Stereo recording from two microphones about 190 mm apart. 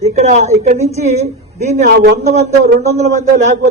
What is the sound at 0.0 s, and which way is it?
Speech, 35° right (ahead or behind).